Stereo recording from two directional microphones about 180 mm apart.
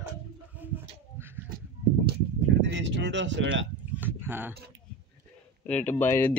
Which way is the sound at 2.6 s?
80° right.